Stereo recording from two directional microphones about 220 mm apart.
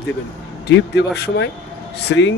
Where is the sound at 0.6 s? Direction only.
50° left (ahead or behind).